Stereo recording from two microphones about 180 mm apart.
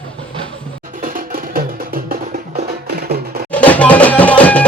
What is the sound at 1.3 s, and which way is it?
Music, 50° right (ahead or behind).